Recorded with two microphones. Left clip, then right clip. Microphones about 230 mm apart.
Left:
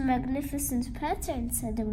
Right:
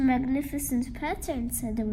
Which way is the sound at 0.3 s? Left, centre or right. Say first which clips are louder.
Right 3 dB; left.